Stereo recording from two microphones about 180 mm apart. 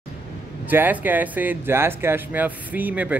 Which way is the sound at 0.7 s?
10° right (ahead or behind).